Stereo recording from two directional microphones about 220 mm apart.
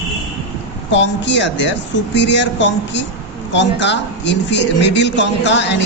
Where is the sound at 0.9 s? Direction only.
55° left (ahead or behind).